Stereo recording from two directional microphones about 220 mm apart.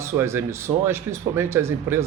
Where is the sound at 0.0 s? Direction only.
10° right (ahead or behind).